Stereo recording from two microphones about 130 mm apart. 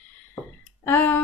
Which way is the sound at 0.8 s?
15° left (ahead or behind).